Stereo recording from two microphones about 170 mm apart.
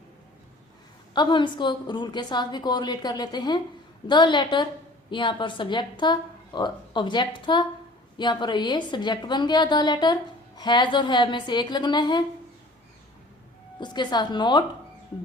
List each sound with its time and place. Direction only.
1.1 s a woman's voice: 25° left (ahead or behind)
13.7 s a woman's voice: 25° left (ahead or behind)